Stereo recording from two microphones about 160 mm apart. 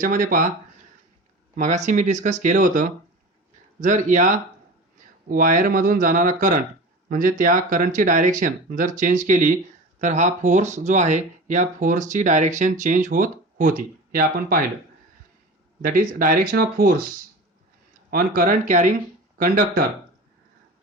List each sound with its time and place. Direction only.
0.0 s speech: 60° right (ahead or behind)
1.5 s speech: 50° right (ahead or behind); by 14.6 s 65° right (ahead or behind)
15.8 s speech: 60° right (ahead or behind)
18.1 s speech: 60° right (ahead or behind)